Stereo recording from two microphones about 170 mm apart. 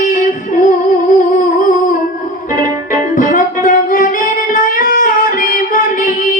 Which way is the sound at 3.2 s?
50° left (ahead or behind).